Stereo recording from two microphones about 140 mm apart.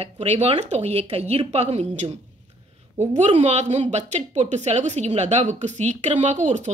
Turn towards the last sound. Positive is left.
turn(degrees=-55)  # may be behind; listen again after turning